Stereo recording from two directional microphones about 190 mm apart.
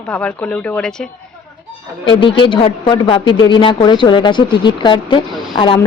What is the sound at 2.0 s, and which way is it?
A woman's voice, 25° left (ahead or behind).